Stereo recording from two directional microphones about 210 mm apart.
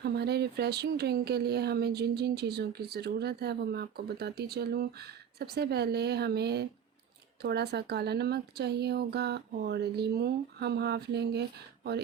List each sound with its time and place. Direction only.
0.0 s speech: 50° right (ahead or behind)